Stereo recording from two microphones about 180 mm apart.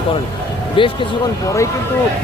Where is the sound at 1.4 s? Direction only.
15° left (ahead or behind).